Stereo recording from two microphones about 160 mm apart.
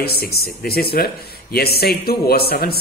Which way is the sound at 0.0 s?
75° left (ahead or behind).